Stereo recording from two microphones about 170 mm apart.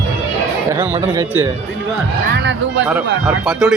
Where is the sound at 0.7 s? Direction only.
15° right (ahead or behind).